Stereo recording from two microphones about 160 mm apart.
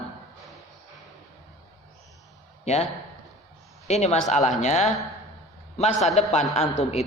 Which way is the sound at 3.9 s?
45° left (ahead or behind).